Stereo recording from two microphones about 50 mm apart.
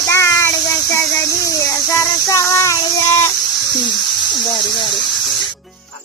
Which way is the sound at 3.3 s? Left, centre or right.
Centre.